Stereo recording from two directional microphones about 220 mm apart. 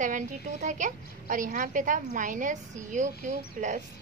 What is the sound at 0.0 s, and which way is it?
A woman's voice, 35° right (ahead or behind).